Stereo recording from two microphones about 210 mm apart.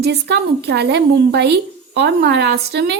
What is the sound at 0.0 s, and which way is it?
A woman's voice, 50° right (ahead or behind).